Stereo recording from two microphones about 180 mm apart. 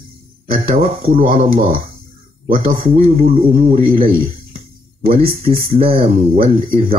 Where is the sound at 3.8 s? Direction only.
30° right (ahead or behind).